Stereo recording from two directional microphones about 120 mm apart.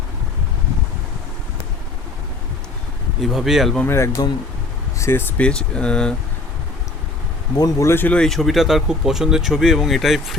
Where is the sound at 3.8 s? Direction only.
20° left (ahead or behind).